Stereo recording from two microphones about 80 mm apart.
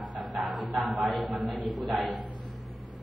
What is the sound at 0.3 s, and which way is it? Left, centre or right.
Music, centre.